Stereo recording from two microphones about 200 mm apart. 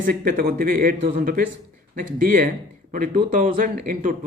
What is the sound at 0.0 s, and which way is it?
Speech, 45° right (ahead or behind).